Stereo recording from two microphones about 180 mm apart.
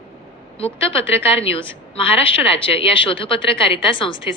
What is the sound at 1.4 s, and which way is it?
A woman's voice, 30° left (ahead or behind).